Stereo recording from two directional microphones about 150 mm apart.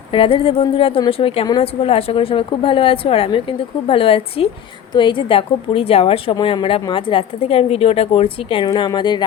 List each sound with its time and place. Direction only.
0.1 s a woman's voice: 35° left (ahead or behind)